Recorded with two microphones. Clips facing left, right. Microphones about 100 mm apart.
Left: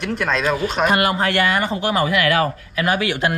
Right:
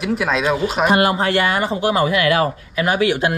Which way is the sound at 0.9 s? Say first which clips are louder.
Right 2 dB; 30° right (ahead or behind).